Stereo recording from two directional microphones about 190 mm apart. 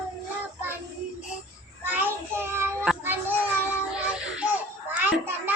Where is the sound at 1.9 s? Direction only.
10° right (ahead or behind).